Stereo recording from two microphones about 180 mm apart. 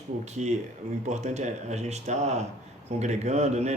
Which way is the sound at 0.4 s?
40° right (ahead or behind).